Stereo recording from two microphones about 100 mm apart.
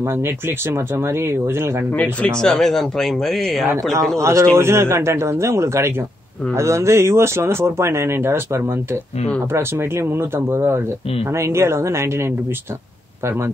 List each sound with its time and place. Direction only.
0.2 s speech: 25° right (ahead or behind)
2.0 s speech: 10° left (ahead or behind)
4.2 s speech: 30° right (ahead or behind)